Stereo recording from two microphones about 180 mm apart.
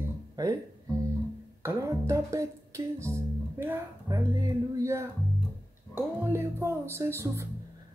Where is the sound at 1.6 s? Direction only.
15° right (ahead or behind).